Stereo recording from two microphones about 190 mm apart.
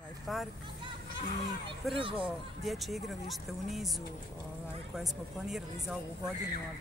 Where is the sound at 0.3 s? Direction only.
Centre (ahead or behind).